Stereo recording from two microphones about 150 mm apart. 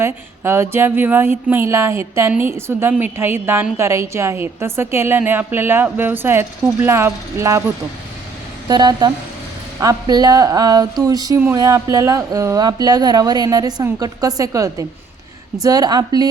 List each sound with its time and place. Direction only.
0.0 s a woman's voice: 15° right (ahead or behind)
8.6 s speech: 25° right (ahead or behind)